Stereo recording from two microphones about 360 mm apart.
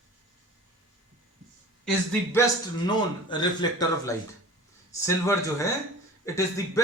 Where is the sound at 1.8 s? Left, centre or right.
Centre.